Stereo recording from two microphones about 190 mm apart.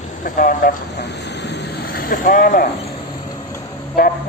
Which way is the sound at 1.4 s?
65° left (ahead or behind).